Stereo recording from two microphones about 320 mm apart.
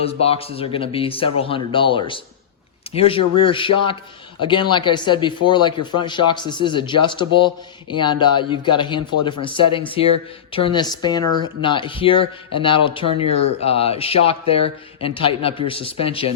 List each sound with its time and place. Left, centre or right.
0.0 s speech: centre